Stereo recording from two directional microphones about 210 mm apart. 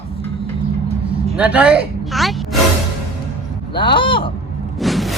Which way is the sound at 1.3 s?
5° right (ahead or behind).